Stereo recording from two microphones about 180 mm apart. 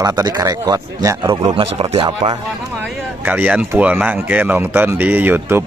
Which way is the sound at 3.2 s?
10° right (ahead or behind).